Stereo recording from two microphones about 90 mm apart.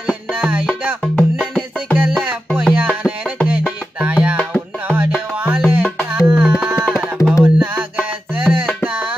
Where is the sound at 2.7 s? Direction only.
15° right (ahead or behind).